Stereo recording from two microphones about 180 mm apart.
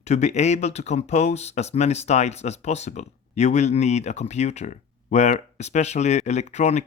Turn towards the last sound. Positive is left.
turn(degrees=40)  # may be behind; listen again after turning